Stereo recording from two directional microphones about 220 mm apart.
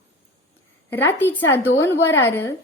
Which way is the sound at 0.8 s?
10° left (ahead or behind).